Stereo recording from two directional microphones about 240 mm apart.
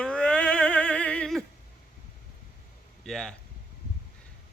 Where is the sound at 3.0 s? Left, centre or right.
Centre.